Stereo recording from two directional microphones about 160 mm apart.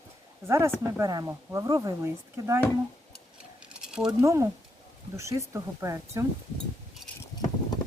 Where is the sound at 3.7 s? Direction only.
5° right (ahead or behind).